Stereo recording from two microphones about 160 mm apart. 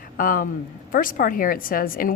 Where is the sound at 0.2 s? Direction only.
60° left (ahead or behind).